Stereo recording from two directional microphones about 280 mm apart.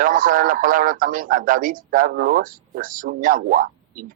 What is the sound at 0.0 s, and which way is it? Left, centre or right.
Speech, right.